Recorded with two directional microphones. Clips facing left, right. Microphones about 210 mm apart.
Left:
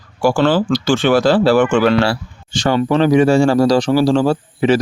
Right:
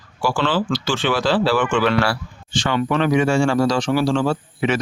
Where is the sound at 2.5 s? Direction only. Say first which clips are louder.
Left 5 dB; 40° left (ahead or behind).